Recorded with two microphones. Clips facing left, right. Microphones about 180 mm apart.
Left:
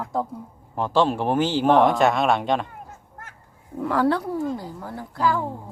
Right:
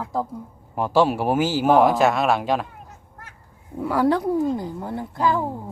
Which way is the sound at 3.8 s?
10° right (ahead or behind).